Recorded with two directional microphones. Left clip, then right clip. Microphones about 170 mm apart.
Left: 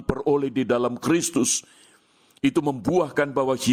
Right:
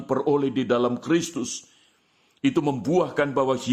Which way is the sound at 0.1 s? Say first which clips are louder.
Even; 50° left (ahead or behind).